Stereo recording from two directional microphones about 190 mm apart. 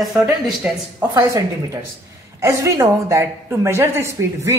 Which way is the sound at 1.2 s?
15° right (ahead or behind).